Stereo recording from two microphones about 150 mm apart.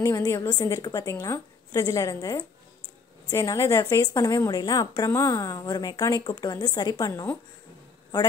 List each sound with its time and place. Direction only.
0.0 s a woman's voice: 20° left (ahead or behind)